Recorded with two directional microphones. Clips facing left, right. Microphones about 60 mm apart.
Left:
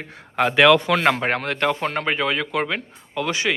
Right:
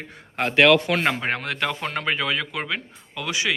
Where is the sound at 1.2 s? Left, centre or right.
Left.